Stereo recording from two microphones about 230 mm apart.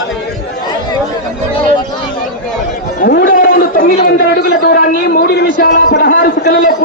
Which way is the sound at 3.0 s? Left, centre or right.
Left.